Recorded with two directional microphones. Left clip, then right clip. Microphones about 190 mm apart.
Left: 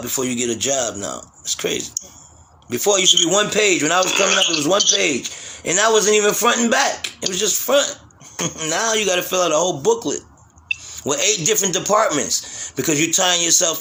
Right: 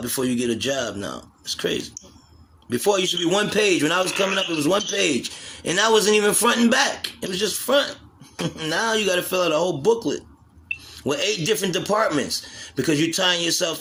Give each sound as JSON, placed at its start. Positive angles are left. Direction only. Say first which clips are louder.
{"t": 0.0, "sound": "a man's voice", "louder": "left 2 dB", "side_deg": -20}
{"t": 4.1, "sound": "speech", "louder": "left 6 dB", "side_deg": 45}
{"t": 4.9, "sound": "a man's voice", "louder": "left 3 dB", "side_deg": -25}
{"t": 11.0, "sound": "a man's voice", "louder": "left 3 dB", "side_deg": -20}